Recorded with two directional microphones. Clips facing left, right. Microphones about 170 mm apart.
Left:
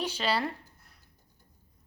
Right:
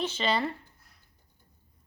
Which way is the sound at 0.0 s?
5° left (ahead or behind).